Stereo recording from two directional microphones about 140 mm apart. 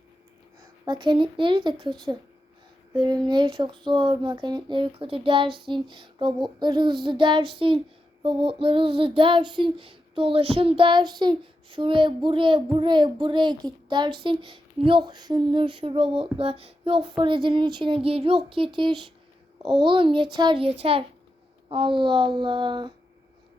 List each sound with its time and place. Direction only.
0.9 s speech: 35° right (ahead or behind)